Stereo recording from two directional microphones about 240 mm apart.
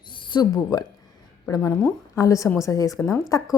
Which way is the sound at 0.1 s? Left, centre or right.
Centre.